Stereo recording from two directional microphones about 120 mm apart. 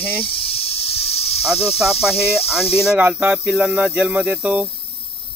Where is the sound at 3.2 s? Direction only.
10° right (ahead or behind).